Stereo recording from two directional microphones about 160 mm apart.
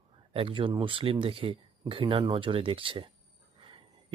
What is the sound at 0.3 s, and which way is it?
A man's voice, 35° right (ahead or behind).